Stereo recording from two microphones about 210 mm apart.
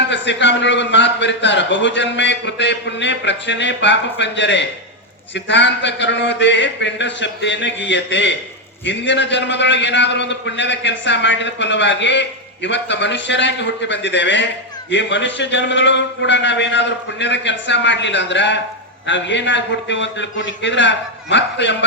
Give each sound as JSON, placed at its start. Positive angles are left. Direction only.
{"t": 0.1, "sound": "a man's voice", "side_deg": 60}